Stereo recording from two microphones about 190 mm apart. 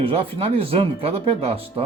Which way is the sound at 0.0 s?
30° right (ahead or behind).